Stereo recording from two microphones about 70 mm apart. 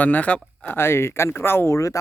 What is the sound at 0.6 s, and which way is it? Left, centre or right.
Speech, left.